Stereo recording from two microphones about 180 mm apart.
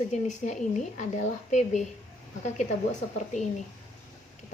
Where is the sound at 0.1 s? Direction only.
40° left (ahead or behind).